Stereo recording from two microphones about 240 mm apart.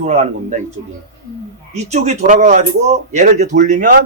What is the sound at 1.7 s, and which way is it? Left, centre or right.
Speech, right.